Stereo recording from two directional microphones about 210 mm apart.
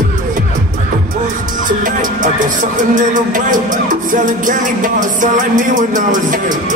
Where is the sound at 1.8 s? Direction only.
40° right (ahead or behind).